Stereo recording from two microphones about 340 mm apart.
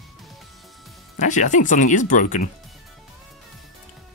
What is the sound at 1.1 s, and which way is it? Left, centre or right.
Speech, left.